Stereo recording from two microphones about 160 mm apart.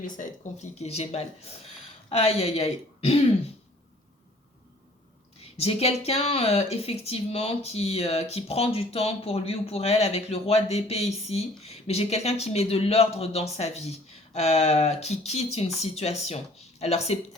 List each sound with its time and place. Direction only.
0.0 s speech: 50° left (ahead or behind)
5.5 s speech: 40° left (ahead or behind)